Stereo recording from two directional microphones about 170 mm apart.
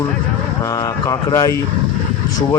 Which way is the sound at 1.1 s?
20° left (ahead or behind).